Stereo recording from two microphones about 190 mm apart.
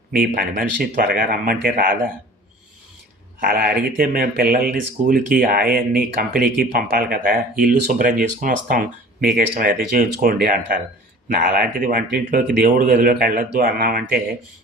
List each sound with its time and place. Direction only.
0.1 s speech: 45° right (ahead or behind)
3.4 s speech: 50° right (ahead or behind)